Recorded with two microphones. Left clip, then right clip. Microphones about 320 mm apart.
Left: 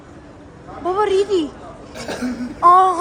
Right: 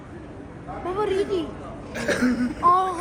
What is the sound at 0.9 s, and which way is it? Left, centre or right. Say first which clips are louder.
Speech: left 7 dB; left.